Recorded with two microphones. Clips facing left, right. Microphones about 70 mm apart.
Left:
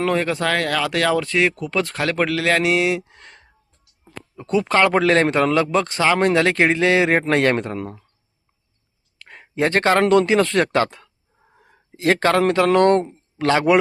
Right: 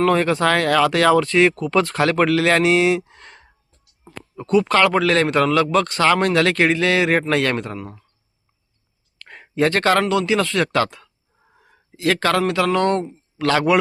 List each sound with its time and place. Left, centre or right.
0.0 s speech: centre
4.4 s speech: left
7.8 s speech: left
9.1 s a sound: centre
9.6 s speech: left
10.1 s speech: left
10.7 s speech: left
13.0 s a man's voice: left